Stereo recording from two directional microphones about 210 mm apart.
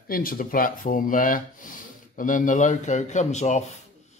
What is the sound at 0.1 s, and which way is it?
Speech, 45° left (ahead or behind).